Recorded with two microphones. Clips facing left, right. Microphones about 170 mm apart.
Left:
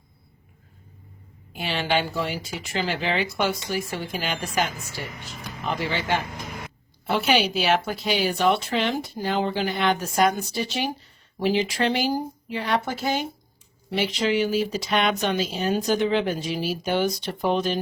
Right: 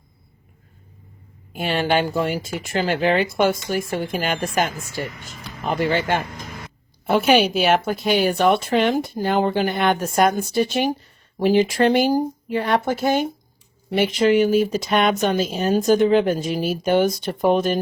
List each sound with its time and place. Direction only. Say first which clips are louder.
1.5 s a woman's voice: right 5 dB; 50° right (ahead or behind)